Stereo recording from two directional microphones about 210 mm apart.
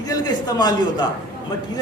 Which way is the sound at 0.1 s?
20° left (ahead or behind).